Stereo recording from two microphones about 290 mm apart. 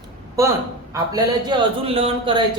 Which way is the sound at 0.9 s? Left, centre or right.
Centre.